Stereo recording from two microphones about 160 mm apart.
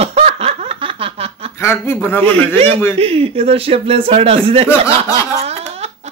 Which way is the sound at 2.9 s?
35° right (ahead or behind).